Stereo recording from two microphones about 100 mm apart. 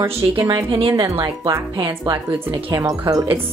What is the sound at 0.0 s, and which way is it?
Speech, 30° right (ahead or behind).